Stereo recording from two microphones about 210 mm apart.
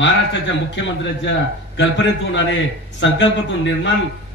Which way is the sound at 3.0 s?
60° left (ahead or behind).